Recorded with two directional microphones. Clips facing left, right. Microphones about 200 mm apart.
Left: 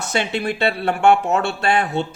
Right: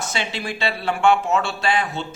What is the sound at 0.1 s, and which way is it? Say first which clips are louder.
Speech: left 6 dB; 55° left (ahead or behind).